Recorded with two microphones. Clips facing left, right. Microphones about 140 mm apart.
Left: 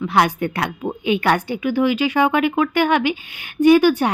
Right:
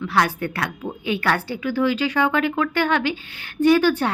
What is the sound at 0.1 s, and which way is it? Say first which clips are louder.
Speech: left 3 dB; 20° left (ahead or behind).